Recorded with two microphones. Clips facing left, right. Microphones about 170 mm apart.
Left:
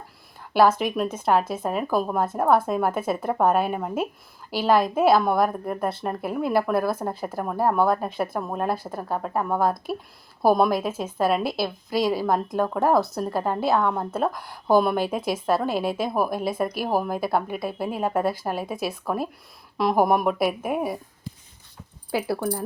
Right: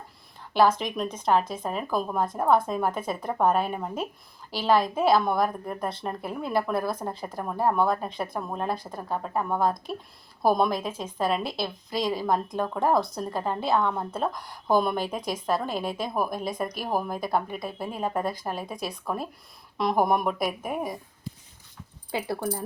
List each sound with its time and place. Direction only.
0.8 s a woman's voice: 5° left (ahead or behind)
22.1 s speech: 5° left (ahead or behind)